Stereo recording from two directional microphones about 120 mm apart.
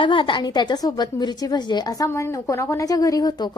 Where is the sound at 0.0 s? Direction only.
45° left (ahead or behind).